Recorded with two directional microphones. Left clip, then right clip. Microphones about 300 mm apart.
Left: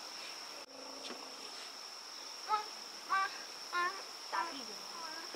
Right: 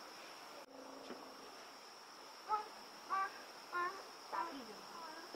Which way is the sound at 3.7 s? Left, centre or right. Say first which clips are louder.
Left 5 dB; centre.